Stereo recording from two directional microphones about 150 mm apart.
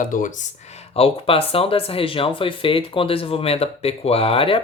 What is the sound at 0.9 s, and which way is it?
Speech, 40° left (ahead or behind).